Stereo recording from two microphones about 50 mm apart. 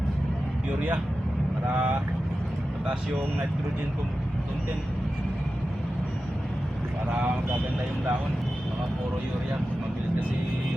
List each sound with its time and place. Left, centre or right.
1.6 s speech: right